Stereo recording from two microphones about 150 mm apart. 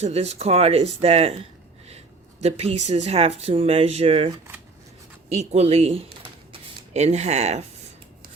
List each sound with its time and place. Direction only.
0.0 s speech: 45° right (ahead or behind)
5.3 s speech: 45° right (ahead or behind)
6.5 s a sound: 50° right (ahead or behind)